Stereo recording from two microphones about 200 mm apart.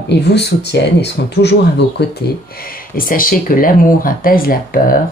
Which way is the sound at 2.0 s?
60° left (ahead or behind).